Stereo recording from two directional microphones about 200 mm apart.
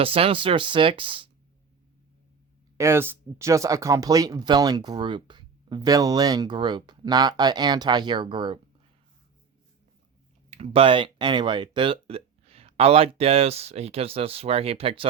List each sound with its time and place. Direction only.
0.0 s speech: 30° right (ahead or behind)
2.7 s speech: 15° right (ahead or behind)
10.5 s speech: 30° right (ahead or behind)